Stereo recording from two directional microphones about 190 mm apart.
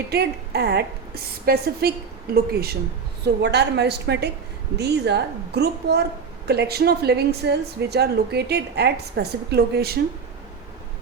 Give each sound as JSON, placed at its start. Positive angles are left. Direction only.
{"t": 0.1, "sound": "a woman's voice", "side_deg": -60}